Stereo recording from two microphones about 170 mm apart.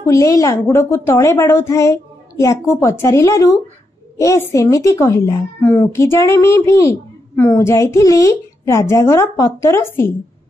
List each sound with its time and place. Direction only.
0.0 s a woman's voice: 20° left (ahead or behind)